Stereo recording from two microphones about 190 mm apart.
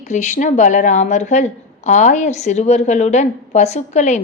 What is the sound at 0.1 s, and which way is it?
A woman's voice, 40° left (ahead or behind).